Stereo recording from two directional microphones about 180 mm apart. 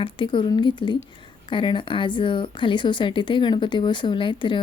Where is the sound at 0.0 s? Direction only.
25° left (ahead or behind).